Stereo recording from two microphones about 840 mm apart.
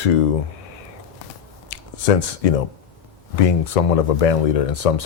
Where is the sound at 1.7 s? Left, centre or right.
Left.